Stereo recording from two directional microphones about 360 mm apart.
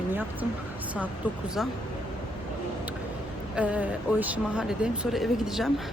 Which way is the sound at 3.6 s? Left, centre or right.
Centre.